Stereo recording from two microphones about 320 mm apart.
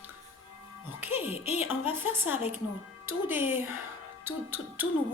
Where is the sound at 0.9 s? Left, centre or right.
Centre.